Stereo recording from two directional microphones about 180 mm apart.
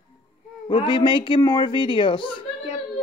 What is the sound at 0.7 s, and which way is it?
A woman's voice, 25° left (ahead or behind).